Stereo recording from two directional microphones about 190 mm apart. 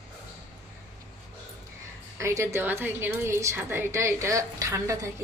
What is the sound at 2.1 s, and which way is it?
A woman's voice, 15° right (ahead or behind).